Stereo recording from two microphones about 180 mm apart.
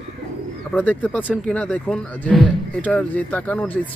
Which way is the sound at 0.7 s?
10° left (ahead or behind).